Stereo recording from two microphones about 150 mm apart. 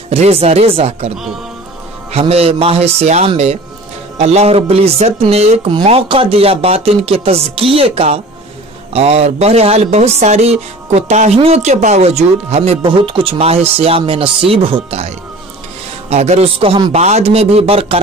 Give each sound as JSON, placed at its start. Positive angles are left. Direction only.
{"t": 0.1, "sound": "speech", "side_deg": -40}
{"t": 2.1, "sound": "speech", "side_deg": -40}
{"t": 16.9, "sound": "speech", "side_deg": -45}